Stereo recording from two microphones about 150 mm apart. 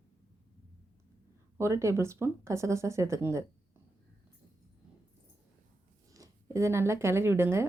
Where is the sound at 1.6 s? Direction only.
20° right (ahead or behind).